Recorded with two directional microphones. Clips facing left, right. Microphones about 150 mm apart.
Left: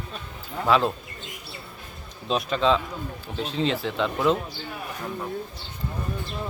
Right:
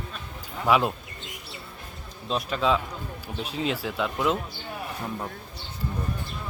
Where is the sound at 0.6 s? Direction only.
10° right (ahead or behind).